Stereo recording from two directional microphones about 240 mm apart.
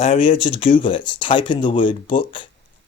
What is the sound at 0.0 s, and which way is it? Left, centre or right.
Speech, left.